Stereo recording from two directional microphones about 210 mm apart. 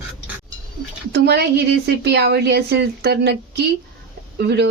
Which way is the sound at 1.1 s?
55° right (ahead or behind).